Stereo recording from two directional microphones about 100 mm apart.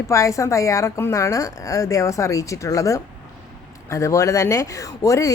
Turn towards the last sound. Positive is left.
turn(degrees=35)  # may be behind; listen again after turning